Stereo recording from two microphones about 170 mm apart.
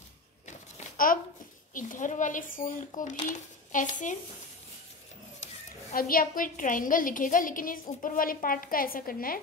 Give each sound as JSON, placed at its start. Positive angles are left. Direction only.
{"t": 0.5, "sound": "a sound", "side_deg": 50}
{"t": 1.7, "sound": "speech", "side_deg": 50}
{"t": 5.9, "sound": "a woman's voice", "side_deg": 55}